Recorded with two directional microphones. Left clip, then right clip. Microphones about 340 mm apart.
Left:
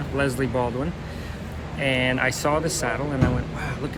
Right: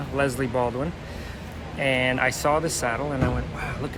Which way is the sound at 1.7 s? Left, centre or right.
Centre.